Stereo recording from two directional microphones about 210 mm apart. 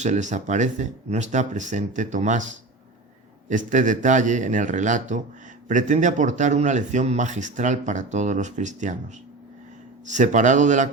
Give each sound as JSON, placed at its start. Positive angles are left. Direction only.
{"t": 0.0, "sound": "speech", "side_deg": -35}
{"t": 10.1, "sound": "speech", "side_deg": -35}